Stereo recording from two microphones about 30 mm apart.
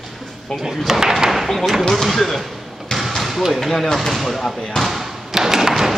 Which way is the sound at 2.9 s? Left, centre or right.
Centre.